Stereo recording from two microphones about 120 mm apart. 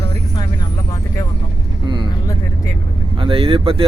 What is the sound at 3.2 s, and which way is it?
Speech, 50° right (ahead or behind).